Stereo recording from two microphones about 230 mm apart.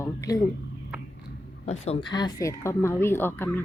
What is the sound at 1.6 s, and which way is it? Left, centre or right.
Speech, left.